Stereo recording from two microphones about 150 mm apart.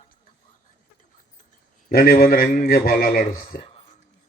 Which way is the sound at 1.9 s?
75° left (ahead or behind).